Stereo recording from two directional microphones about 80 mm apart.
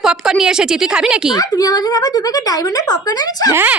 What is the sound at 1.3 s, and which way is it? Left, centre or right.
A child's voice, left.